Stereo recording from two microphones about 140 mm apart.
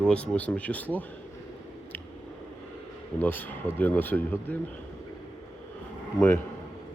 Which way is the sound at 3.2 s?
15° left (ahead or behind).